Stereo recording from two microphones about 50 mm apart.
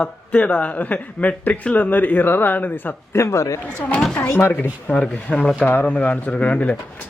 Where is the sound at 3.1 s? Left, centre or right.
Left.